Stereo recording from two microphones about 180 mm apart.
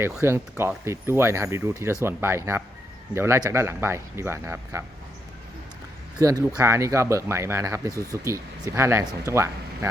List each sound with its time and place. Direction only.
0.2 s speech: 15° right (ahead or behind)
6.1 s speech: 20° right (ahead or behind)